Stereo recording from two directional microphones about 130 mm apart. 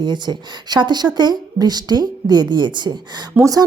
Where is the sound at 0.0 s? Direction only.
35° right (ahead or behind).